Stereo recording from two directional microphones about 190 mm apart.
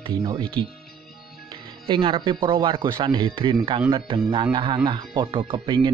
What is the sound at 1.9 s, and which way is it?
Speech, 25° right (ahead or behind).